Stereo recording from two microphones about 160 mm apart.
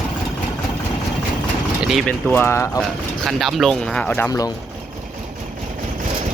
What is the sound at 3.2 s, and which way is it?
Speech, centre (ahead or behind).